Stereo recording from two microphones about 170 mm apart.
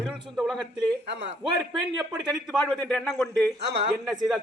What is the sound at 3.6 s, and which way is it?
Speech, 85° right.